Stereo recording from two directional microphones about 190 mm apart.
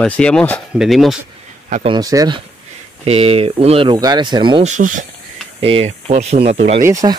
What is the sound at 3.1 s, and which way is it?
Speech, 30° right (ahead or behind).